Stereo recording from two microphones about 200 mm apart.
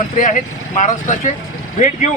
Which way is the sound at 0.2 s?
40° left (ahead or behind).